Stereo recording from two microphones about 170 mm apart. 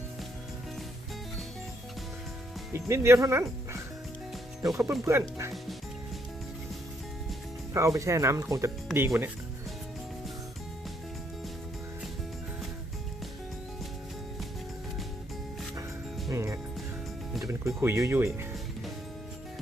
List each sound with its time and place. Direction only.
2.7 s speech: 15° right (ahead or behind)
4.6 s speech: 5° right (ahead or behind)
5.0 s speech: 15° right (ahead or behind)
7.7 s speech: 20° right (ahead or behind)
16.3 s music: 15° right (ahead or behind)
17.4 s speech: 15° right (ahead or behind)